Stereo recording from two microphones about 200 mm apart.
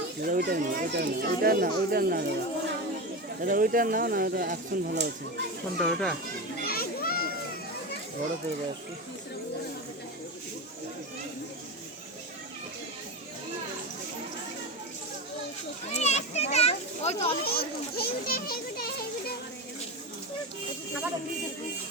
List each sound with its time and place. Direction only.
0.2 s speech: 45° right (ahead or behind)
5.8 s speech: centre (ahead or behind)
6.6 s children playing: 50° left (ahead or behind)
15.9 s a child's voice: 35° left (ahead or behind)
17.4 s a child's voice: 50° left (ahead or behind)